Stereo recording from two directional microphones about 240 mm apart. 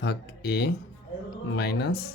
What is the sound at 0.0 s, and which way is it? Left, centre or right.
Speech, left.